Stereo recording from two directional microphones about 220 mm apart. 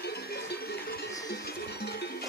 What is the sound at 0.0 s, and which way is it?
Sheep, 45° left (ahead or behind).